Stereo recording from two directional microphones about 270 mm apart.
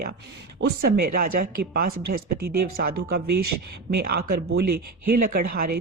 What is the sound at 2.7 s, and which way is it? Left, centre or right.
Speech, right.